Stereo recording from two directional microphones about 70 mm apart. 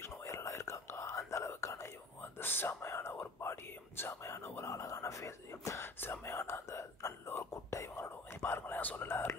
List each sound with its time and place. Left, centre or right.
0.0 s whispering: left
2.3 s whispering: left
5.9 s whispering: left